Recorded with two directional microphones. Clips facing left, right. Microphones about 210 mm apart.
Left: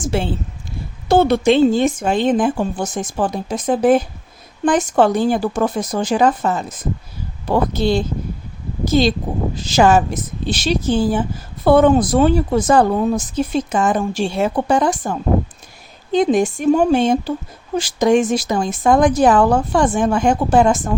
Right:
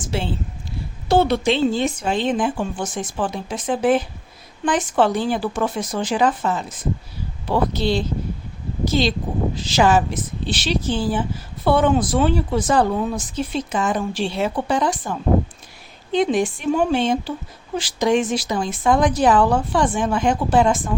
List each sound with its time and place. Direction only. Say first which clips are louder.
0.0 s a woman's voice: left 5 dB; 50° left (ahead or behind)